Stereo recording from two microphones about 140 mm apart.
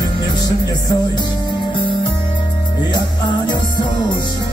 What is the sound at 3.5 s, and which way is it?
Music, 35° left (ahead or behind).